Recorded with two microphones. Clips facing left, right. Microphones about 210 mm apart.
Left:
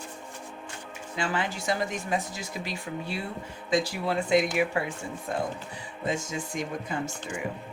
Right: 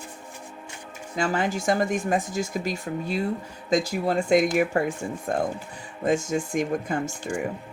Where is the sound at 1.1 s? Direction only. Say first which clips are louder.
Right 5 dB; 45° right (ahead or behind).